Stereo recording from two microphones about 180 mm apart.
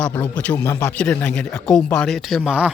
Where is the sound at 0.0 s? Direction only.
10° left (ahead or behind).